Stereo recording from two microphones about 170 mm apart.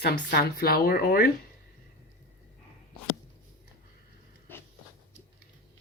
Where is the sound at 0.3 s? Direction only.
60° left (ahead or behind).